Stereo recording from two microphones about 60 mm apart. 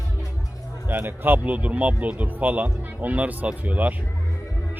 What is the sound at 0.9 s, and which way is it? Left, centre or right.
Speech, right.